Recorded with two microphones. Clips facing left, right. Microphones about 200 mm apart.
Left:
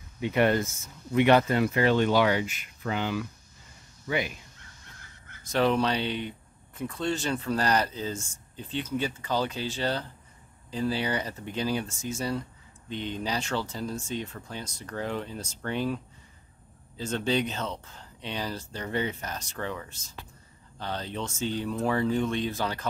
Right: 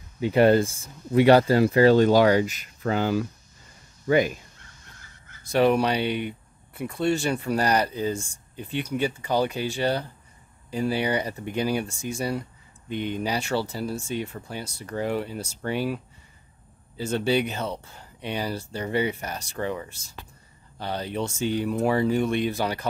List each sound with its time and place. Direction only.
0.2 s speech: 30° right (ahead or behind)
5.4 s speech: 10° right (ahead or behind)